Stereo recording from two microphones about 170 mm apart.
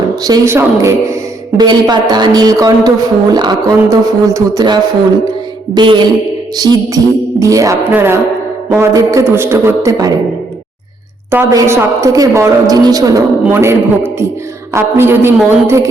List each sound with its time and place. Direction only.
0.3 s a man's voice: 15° right (ahead or behind)
11.3 s a woman's voice: 15° right (ahead or behind)